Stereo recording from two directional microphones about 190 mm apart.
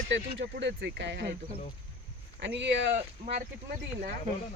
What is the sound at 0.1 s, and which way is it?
Speech, 70° right (ahead or behind).